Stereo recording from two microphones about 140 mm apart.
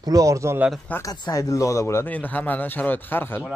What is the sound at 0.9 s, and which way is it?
Speech, 25° left (ahead or behind).